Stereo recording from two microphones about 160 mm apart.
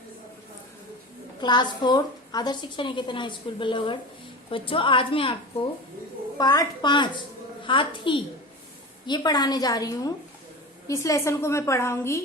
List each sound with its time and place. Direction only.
1.4 s a woman's voice: 25° left (ahead or behind)
6.3 s a woman's voice: 25° left (ahead or behind)